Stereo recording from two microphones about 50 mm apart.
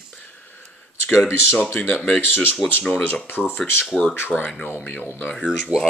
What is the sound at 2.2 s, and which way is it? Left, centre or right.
Speech, left.